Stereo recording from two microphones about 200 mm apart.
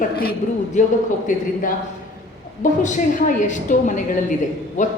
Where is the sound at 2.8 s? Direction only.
40° left (ahead or behind).